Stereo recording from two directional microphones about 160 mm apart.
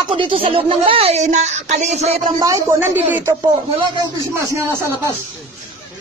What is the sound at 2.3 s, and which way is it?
Speech, 20° right (ahead or behind).